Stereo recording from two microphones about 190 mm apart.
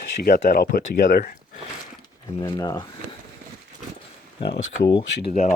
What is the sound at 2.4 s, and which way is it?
Speech, 20° left (ahead or behind).